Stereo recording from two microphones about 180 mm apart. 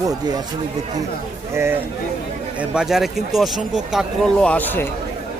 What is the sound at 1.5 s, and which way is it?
Speech, 10° right (ahead or behind).